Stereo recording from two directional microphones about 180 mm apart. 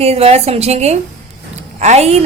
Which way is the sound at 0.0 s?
35° right (ahead or behind).